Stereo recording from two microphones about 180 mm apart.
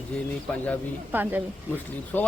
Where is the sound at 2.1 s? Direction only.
10° left (ahead or behind).